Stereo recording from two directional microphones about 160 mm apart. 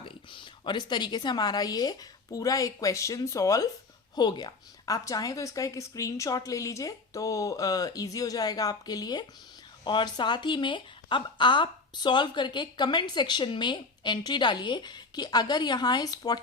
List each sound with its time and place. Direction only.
0.0 s a woman's voice: 30° left (ahead or behind)